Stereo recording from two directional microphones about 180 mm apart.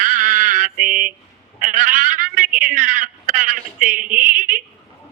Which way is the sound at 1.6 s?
45° right (ahead or behind).